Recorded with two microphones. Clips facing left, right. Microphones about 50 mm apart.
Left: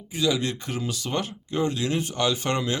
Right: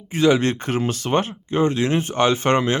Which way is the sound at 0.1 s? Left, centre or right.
Right.